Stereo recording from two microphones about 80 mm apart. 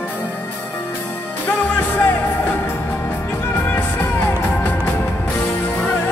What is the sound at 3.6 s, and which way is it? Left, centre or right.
Music, left.